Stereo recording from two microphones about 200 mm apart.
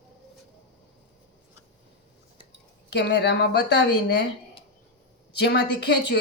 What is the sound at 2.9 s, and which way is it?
A woman's voice, 60° left (ahead or behind).